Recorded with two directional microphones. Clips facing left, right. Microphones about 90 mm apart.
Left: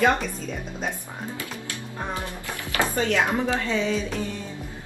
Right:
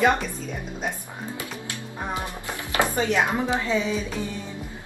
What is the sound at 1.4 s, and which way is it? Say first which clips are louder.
Speech: even; 20° right (ahead or behind).